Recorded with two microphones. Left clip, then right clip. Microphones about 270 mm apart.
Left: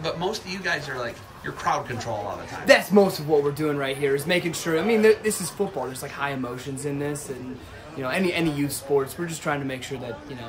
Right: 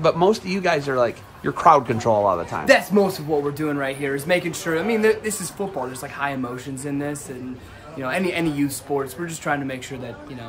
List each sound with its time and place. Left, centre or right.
0.0 s a man's voice: centre
2.6 s speech: centre